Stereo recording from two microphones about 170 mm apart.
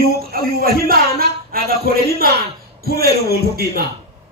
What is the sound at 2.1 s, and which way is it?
A man's voice, 65° right (ahead or behind).